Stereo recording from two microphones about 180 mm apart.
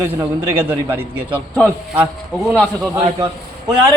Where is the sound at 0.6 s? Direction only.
10° right (ahead or behind).